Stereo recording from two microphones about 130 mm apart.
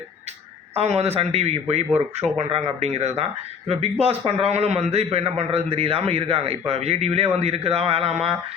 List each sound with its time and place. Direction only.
0.8 s a man's voice: 55° right (ahead or behind)